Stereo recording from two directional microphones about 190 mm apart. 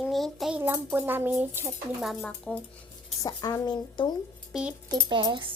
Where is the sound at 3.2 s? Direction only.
20° left (ahead or behind).